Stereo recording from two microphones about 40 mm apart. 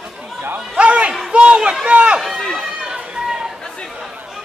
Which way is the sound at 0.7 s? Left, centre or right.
Right.